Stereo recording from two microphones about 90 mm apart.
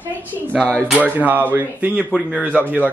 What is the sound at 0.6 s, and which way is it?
Speech, 10° left (ahead or behind).